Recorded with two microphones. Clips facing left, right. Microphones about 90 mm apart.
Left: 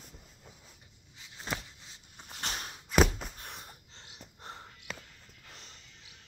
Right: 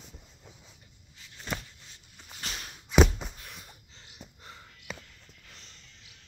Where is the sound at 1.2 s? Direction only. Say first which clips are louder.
Right 1 dB; 20° left (ahead or behind).